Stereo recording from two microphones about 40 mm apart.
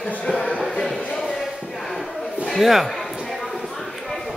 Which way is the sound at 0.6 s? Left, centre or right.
Centre.